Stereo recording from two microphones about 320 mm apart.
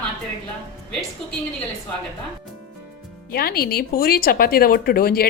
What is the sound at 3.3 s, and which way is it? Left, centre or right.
Speech, left.